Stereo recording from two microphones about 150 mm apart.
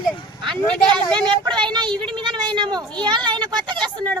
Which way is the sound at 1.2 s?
30° right (ahead or behind).